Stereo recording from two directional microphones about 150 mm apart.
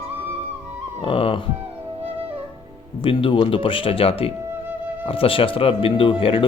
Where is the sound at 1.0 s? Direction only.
35° left (ahead or behind).